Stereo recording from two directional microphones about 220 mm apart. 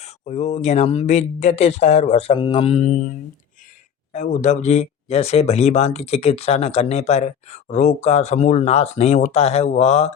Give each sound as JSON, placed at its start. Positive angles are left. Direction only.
{"t": 0.0, "sound": "speech", "side_deg": 30}